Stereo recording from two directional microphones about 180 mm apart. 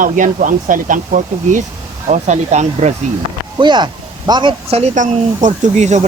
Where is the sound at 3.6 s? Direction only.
25° right (ahead or behind).